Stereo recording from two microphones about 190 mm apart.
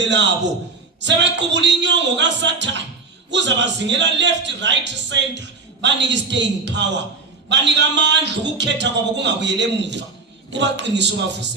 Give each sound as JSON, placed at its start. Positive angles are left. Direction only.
{"t": 0.0, "sound": "a man's voice", "side_deg": -70}